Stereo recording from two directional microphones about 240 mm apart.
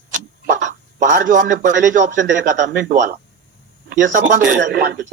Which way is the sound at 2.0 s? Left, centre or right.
Right.